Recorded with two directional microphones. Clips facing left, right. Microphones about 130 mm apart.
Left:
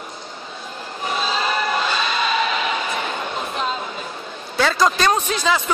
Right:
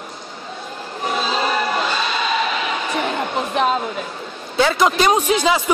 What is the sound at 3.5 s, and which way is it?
Speech, 65° right (ahead or behind).